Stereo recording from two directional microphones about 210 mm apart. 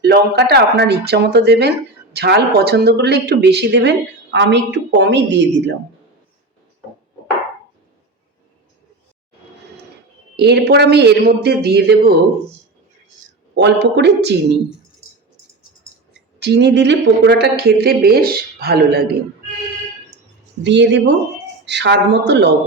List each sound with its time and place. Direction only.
0.0 s speech: 50° right (ahead or behind)
10.3 s speech: 50° right (ahead or behind)
13.6 s speech: 55° right (ahead or behind)
16.4 s speech: 55° right (ahead or behind)
20.7 s a woman's voice: 55° right (ahead or behind)